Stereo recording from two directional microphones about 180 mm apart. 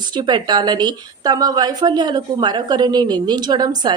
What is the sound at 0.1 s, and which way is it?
A woman's voice, 25° right (ahead or behind).